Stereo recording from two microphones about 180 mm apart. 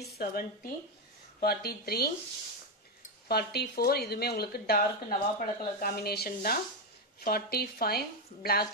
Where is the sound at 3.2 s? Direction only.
60° left (ahead or behind).